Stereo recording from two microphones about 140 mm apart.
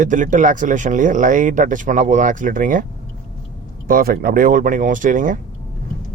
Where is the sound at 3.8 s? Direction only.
90° right; by 5.4 s 70° right (ahead or behind).